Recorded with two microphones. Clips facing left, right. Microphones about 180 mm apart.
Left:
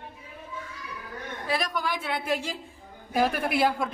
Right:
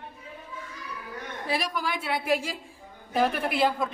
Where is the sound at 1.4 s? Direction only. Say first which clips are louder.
Left 1 dB; 5° right (ahead or behind).